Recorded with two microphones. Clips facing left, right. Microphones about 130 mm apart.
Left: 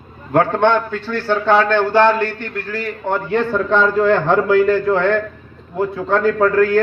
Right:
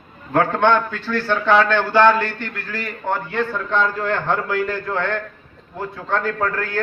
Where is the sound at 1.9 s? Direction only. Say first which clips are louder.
Right 1 dB; 35° left (ahead or behind).